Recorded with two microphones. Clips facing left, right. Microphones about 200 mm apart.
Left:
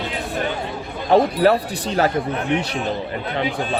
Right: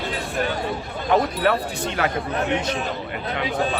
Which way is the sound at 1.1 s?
35° left (ahead or behind).